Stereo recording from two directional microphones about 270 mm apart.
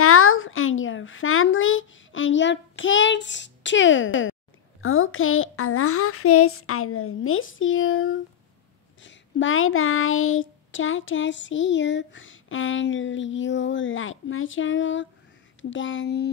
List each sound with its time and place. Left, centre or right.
0.0 s a sound: left
9.0 s child singing: left
15.7 s speech: left